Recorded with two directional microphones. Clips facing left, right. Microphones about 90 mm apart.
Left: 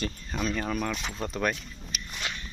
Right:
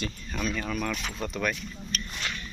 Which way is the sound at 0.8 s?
20° left (ahead or behind).